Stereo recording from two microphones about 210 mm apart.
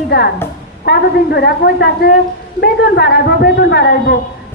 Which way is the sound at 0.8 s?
50° left (ahead or behind).